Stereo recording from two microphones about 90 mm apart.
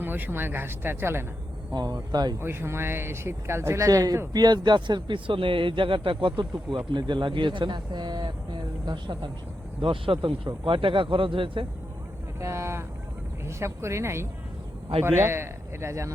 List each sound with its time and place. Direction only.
0.0 s speech: 20° right (ahead or behind)
1.7 s speech: 50° right (ahead or behind)
2.4 s speech: 25° right (ahead or behind); by 6.5 s 65° right (ahead or behind)
6.5 s speech: 55° right (ahead or behind)
8.9 s speech: 60° right (ahead or behind)
9.8 s speech: 75° right (ahead or behind)
12.4 s vehicle: 30° right (ahead or behind)
13.4 s speech: 30° right (ahead or behind)